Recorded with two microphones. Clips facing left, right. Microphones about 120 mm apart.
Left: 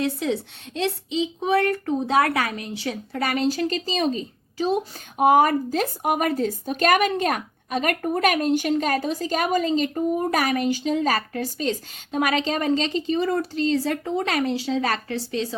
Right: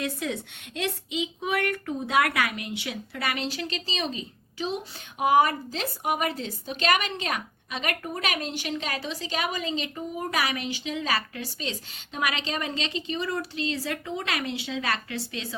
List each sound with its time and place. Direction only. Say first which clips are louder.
0.0 s speech: left 6 dB; 30° left (ahead or behind)